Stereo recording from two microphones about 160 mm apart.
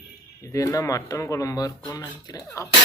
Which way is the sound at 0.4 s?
20° left (ahead or behind).